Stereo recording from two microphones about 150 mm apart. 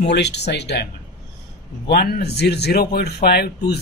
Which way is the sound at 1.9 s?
90° left.